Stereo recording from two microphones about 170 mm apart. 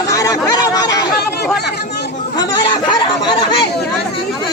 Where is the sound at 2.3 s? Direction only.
25° left (ahead or behind).